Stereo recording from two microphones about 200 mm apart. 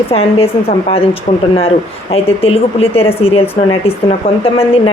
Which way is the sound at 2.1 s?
30° left (ahead or behind).